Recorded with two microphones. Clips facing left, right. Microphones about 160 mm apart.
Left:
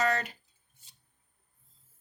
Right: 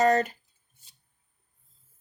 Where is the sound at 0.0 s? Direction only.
45° right (ahead or behind).